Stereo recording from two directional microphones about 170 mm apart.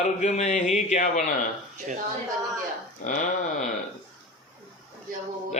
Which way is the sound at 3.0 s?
50° left (ahead or behind).